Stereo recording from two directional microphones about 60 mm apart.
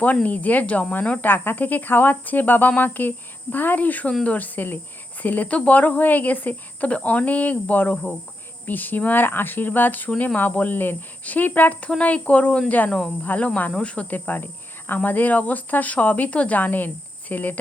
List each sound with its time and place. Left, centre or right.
0.0 s speech: left